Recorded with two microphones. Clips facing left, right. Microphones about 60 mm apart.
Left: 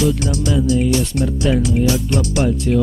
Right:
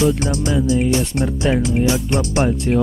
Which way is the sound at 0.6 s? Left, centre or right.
Right.